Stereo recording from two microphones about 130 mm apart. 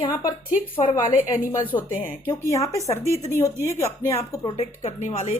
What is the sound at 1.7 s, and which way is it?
Speech, 45° left (ahead or behind).